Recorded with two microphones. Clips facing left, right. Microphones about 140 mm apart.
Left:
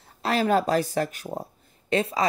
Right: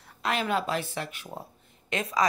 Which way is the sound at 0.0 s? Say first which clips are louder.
Left 5 dB; 35° left (ahead or behind).